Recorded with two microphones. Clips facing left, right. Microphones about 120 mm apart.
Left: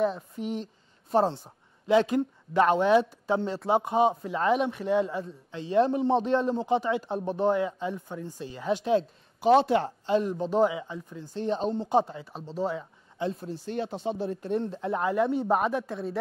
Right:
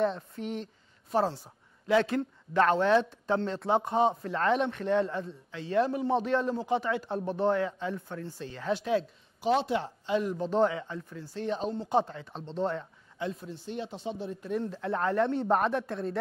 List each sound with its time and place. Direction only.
0.0 s speech: 5° left (ahead or behind)
1.1 s speech: 25° left (ahead or behind); by 5.4 s 5° left (ahead or behind)
5.7 s speech: 25° left (ahead or behind)
9.8 s speech: 35° left (ahead or behind)
10.3 s speech: 15° left (ahead or behind)
11.3 s speech: 30° left (ahead or behind)
12.0 s speech: 10° left (ahead or behind)
13.2 s speech: 30° left (ahead or behind)
13.6 s speech: centre (ahead or behind)
14.0 s speech: 60° left (ahead or behind)
14.4 s speech: 30° left (ahead or behind)
14.8 s speech: 20° left (ahead or behind)
15.0 s speech: 5° left (ahead or behind)